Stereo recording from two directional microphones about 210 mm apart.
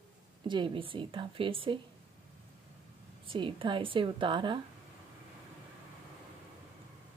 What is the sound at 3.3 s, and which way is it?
Speech, 25° right (ahead or behind).